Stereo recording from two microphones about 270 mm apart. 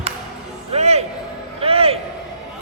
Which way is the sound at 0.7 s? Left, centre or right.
Right.